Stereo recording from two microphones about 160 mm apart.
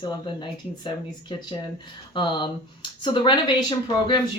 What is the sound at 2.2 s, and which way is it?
Speech, 30° left (ahead or behind).